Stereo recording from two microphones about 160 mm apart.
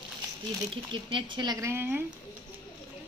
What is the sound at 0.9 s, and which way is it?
Speech, 30° right (ahead or behind).